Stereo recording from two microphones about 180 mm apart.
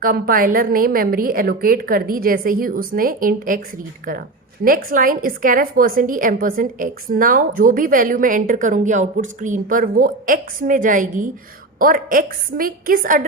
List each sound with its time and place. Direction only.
0.0 s a woman's voice: 50° right (ahead or behind)
4.6 s a woman's voice: 50° right (ahead or behind)